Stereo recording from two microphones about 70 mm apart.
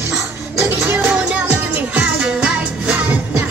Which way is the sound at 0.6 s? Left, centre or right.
Right.